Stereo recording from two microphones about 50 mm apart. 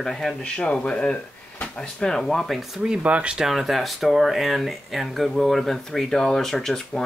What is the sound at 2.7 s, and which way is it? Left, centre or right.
Speech, centre.